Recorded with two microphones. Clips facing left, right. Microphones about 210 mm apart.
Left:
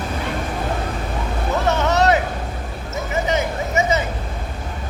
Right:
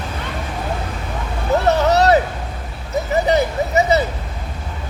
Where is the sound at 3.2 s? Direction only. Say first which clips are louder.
Right 4 dB; 35° right (ahead or behind).